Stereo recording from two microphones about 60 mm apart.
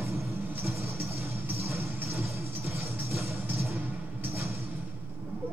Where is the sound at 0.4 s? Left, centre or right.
Right.